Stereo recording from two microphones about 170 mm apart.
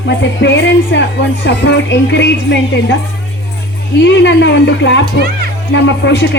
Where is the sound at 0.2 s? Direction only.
90° left.